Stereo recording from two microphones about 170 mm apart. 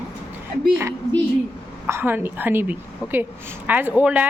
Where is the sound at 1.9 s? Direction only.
15° right (ahead or behind).